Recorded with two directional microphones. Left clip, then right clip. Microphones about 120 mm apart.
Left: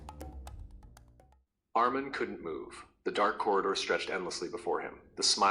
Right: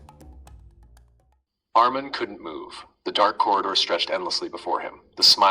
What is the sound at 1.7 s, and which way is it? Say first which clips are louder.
A man's voice: right 10 dB; 45° left (ahead or behind).